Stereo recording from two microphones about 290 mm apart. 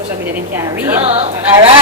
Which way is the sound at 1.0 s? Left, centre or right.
Centre.